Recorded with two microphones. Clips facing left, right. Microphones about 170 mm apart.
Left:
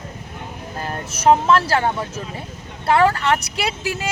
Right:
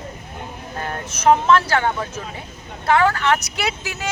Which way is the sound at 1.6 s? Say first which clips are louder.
Left 1 dB; 35° left (ahead or behind).